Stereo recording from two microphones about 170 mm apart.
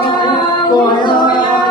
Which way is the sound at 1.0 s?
25° left (ahead or behind).